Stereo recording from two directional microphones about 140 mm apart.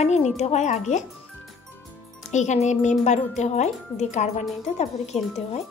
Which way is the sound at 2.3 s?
55° left (ahead or behind).